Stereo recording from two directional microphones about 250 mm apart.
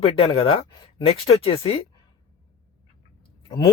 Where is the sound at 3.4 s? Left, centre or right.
Centre.